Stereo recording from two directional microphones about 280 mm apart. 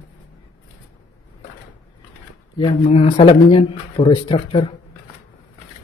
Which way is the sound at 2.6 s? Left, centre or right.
Left.